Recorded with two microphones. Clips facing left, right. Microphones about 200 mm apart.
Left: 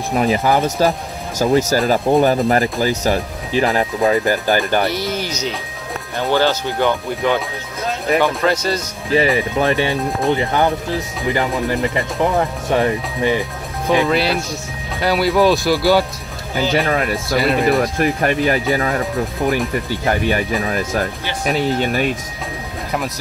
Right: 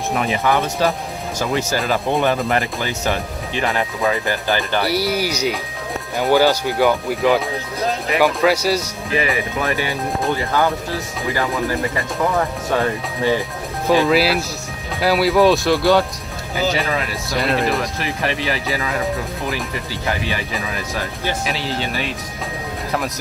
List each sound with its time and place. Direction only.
0.1 s speech: 35° left (ahead or behind)
4.5 s speech: 45° left (ahead or behind)
4.8 s speech: 10° right (ahead or behind)
9.1 s speech: 30° left (ahead or behind)
11.9 s speech: 25° left (ahead or behind)
13.8 s speech: centre (ahead or behind)
16.7 s speech: 50° left (ahead or behind)
17.4 s speech: centre (ahead or behind)
17.9 s speech: 50° left (ahead or behind)
19.9 s speech: 50° left (ahead or behind)